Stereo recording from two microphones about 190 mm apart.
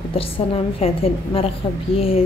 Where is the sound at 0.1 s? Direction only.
30° left (ahead or behind).